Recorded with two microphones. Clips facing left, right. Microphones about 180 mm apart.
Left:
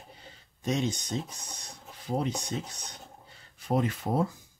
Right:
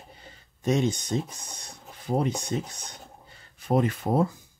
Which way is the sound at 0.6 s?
50° right (ahead or behind).